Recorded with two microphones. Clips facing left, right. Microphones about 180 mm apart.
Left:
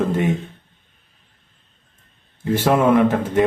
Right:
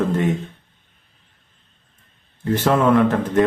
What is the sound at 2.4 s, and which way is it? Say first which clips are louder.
A man's voice: left 1 dB; 10° left (ahead or behind).